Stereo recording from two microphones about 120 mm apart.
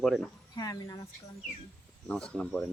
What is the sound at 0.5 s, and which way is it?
Speech, 30° left (ahead or behind).